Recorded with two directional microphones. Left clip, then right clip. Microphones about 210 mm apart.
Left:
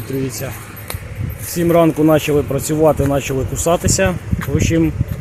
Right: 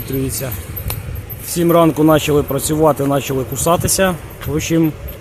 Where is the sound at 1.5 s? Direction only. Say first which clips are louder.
Right 1 dB; 5° right (ahead or behind).